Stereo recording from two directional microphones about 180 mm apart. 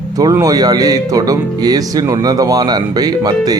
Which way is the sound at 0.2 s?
20° right (ahead or behind).